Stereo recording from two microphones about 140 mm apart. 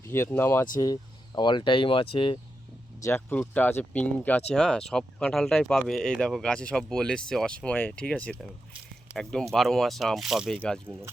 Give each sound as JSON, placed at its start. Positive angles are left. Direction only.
{"t": 0.1, "sound": "speech", "side_deg": 15}
{"t": 1.4, "sound": "speech", "side_deg": 35}
{"t": 3.0, "sound": "speech", "side_deg": 15}